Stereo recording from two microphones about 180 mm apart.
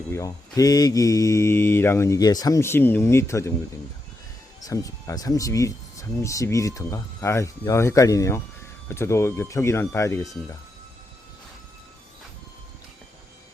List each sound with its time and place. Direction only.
0.1 s speech: 20° left (ahead or behind)
4.6 s speech: 20° left (ahead or behind)